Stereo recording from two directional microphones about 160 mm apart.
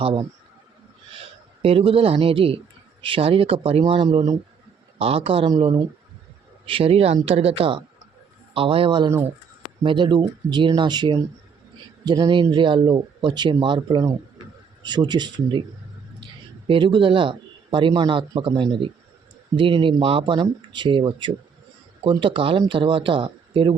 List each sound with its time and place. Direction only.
0.0 s a man's voice: 35° right (ahead or behind)
1.6 s a man's voice: 35° right (ahead or behind)
6.7 s a man's voice: 35° right (ahead or behind)
16.6 s a man's voice: 30° right (ahead or behind)